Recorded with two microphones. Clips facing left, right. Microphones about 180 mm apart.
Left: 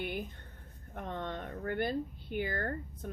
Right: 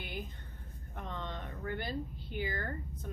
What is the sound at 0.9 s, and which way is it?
Speech, 55° left (ahead or behind).